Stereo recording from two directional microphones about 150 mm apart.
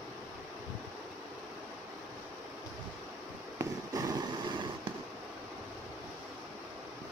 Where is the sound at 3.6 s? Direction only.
25° right (ahead or behind).